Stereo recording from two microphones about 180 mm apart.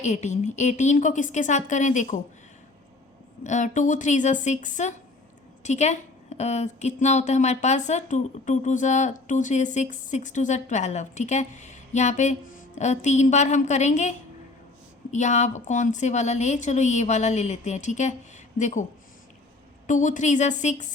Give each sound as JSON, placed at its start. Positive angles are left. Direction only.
{"t": 0.0, "sound": "a woman's voice", "side_deg": 40}
{"t": 3.4, "sound": "a woman's voice", "side_deg": 40}
{"t": 19.9, "sound": "a woman's voice", "side_deg": 45}